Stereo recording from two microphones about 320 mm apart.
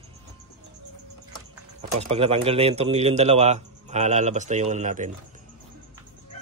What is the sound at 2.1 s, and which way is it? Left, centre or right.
A man's voice, centre.